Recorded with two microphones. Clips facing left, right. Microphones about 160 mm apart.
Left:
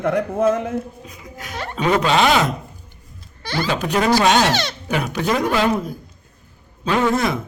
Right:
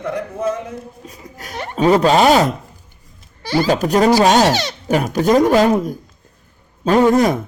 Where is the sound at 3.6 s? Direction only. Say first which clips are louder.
Right 5 dB; 40° right (ahead or behind).